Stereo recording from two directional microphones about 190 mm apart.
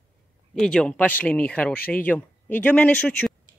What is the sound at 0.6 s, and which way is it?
Speech, 5° left (ahead or behind).